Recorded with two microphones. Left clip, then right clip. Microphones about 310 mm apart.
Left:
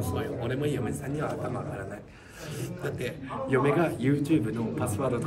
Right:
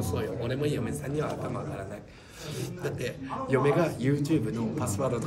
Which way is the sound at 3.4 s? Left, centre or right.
Centre.